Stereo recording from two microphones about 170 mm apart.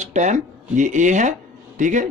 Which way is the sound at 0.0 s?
45° right (ahead or behind).